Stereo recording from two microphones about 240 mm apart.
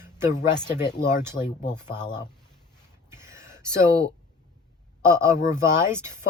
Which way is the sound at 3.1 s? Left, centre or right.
Centre.